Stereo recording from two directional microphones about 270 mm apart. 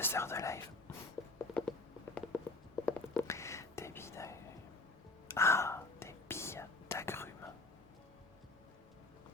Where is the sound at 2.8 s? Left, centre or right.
Centre.